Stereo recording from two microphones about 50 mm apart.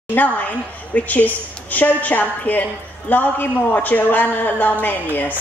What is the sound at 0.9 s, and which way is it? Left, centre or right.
A woman's voice, left.